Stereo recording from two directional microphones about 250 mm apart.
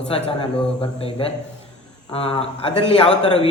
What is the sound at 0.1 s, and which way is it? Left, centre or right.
A man's voice, left.